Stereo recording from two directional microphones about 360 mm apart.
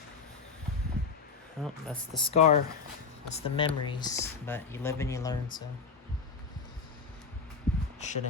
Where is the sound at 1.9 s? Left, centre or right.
Centre.